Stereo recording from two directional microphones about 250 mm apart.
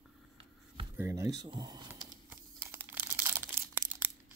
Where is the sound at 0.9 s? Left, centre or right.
Centre.